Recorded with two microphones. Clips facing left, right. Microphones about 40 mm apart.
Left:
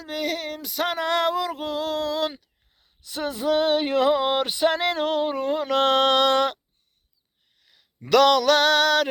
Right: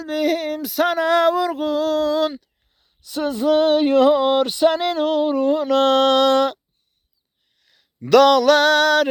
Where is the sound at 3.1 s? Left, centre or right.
Centre; by 6.5 s left.